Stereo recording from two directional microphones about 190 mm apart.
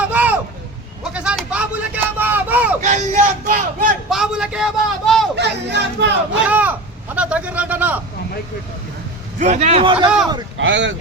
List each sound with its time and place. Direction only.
0.0 s a sound: 10° right (ahead or behind)
2.8 s speech: 40° right (ahead or behind)
4.1 s a man's voice: 5° right (ahead or behind)
5.4 s speech: 65° right (ahead or behind)
6.5 s a man's voice: 10° right (ahead or behind)
9.4 s a man's voice: 40° right (ahead or behind)
10.6 s speech: 75° right (ahead or behind)